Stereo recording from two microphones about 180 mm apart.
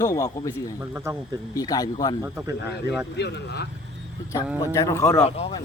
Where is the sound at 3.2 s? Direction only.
65° left (ahead or behind).